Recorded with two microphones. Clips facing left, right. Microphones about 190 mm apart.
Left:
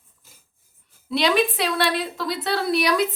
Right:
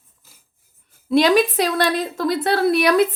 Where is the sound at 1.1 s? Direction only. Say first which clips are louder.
Right 5 dB; 45° right (ahead or behind).